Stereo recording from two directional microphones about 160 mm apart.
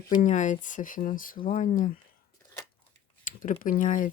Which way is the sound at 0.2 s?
50° left (ahead or behind).